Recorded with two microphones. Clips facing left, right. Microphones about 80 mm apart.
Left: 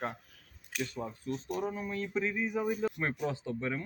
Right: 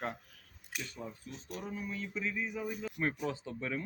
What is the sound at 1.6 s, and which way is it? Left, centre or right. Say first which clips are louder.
Speech: left 2 dB; left.